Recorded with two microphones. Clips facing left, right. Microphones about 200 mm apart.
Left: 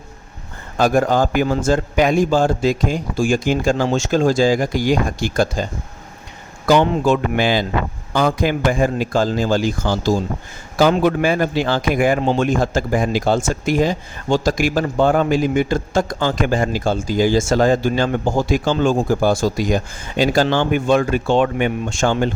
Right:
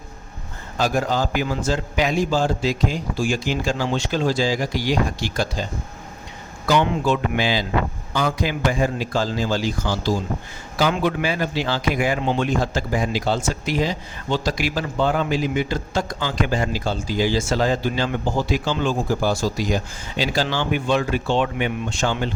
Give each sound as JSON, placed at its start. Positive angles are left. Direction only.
{"t": 0.8, "sound": "speech", "side_deg": 55}
{"t": 6.7, "sound": "speech", "side_deg": 40}